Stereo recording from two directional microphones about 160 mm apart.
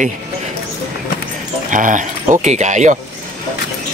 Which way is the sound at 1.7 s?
55° right (ahead or behind).